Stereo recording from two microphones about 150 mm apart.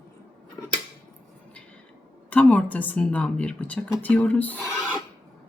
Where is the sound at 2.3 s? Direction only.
10° left (ahead or behind).